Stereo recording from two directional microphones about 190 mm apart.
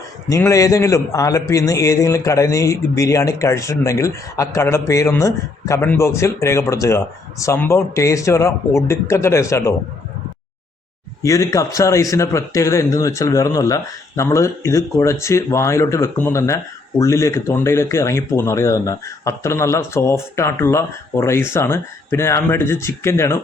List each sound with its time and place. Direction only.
0.3 s a man's voice: 15° left (ahead or behind)
11.2 s a man's voice: 15° left (ahead or behind)